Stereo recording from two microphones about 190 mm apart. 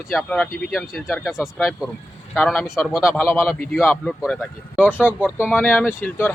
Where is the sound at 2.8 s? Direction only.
15° left (ahead or behind).